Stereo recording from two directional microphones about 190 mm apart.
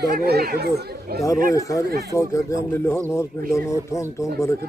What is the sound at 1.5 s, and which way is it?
Speech, 15° left (ahead or behind).